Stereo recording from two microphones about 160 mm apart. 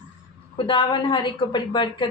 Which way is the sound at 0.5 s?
30° left (ahead or behind).